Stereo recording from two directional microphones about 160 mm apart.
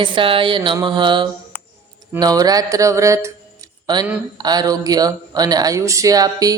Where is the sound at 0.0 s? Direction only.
30° right (ahead or behind).